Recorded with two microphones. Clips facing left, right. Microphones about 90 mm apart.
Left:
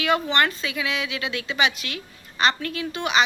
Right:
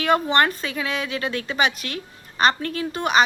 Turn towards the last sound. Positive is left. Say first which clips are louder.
# right 3 dB
turn(degrees=-45)  # may be behind; listen again after turning